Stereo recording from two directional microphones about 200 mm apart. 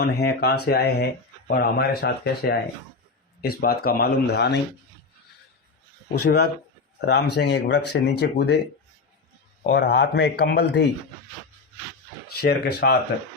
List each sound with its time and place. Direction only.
0.0 s speech: 55° left (ahead or behind)
6.2 s speech: 50° left (ahead or behind)
9.6 s speech: 55° left (ahead or behind)
12.4 s speech: 55° left (ahead or behind)